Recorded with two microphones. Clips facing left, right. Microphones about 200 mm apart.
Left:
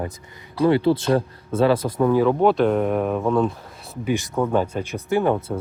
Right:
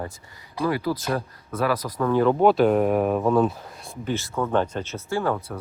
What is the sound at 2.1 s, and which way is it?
Speech, centre (ahead or behind).